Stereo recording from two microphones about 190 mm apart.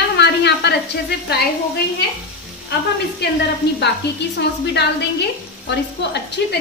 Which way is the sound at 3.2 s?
60° left (ahead or behind).